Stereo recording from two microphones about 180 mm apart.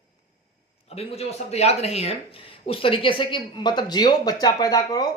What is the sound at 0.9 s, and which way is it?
A woman's voice, 35° left (ahead or behind).